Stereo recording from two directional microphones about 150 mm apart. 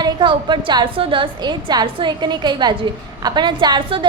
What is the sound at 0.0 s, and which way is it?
A woman's voice, 30° right (ahead or behind).